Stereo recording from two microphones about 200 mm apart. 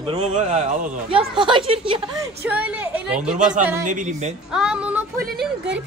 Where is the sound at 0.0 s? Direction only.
30° right (ahead or behind).